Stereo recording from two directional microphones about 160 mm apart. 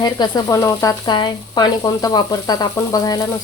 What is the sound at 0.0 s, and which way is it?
Speech, 25° left (ahead or behind).